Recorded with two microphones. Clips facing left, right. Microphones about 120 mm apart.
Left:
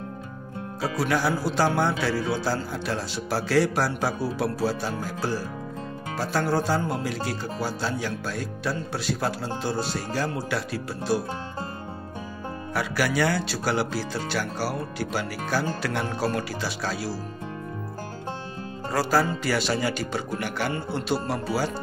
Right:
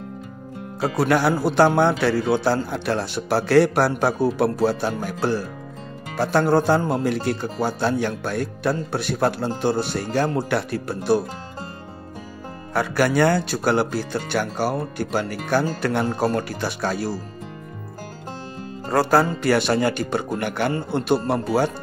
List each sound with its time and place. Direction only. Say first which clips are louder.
0.9 s speech: right 6 dB; 60° right (ahead or behind)
12.7 s speech: right 6 dB; 50° right (ahead or behind)
18.9 s speech: right 5 dB; 55° right (ahead or behind)